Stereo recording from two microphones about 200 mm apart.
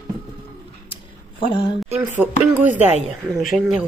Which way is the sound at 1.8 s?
10° right (ahead or behind).